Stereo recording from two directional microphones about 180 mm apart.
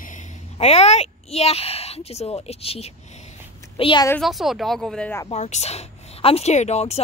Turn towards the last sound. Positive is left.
turn(degrees=35)  # may be behind; listen again after turning